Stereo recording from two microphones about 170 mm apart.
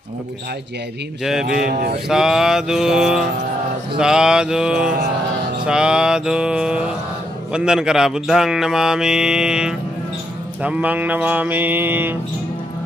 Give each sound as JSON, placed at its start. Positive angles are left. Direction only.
{"t": 1.2, "sound": "speech", "side_deg": -5}
{"t": 1.6, "sound": "mantra", "side_deg": -60}
{"t": 2.0, "sound": "speech", "side_deg": -5}
{"t": 10.6, "sound": "a sound", "side_deg": -10}